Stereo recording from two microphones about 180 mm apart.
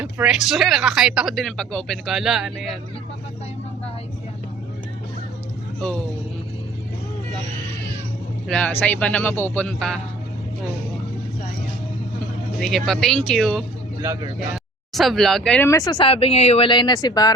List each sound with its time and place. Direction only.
0.0 s speech: 5° right (ahead or behind)
8.4 s a man's voice: 5° left (ahead or behind)
12.5 s speech: centre (ahead or behind)
14.0 s speech: 15° right (ahead or behind)
14.5 s speech: centre (ahead or behind); by 17.3 s 20° left (ahead or behind)